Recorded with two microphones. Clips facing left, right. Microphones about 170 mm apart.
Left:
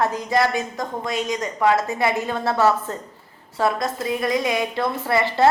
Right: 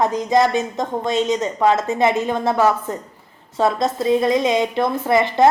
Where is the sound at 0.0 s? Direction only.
20° right (ahead or behind).